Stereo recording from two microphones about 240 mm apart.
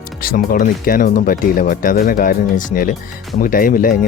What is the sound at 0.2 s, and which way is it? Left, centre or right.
Speech, left.